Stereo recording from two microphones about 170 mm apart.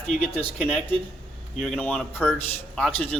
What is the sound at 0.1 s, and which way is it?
A man's voice, 5° left (ahead or behind).